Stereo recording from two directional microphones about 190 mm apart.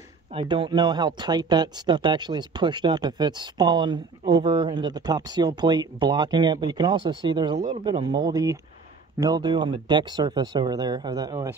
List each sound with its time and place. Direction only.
0.3 s speech: 30° right (ahead or behind)